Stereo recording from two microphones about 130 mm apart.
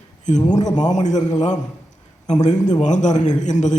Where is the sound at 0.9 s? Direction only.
65° left (ahead or behind).